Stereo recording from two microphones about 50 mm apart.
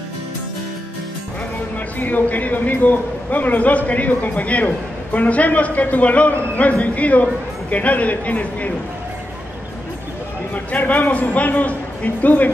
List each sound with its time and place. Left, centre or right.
2.0 s a man's voice: left
10.5 s speech: left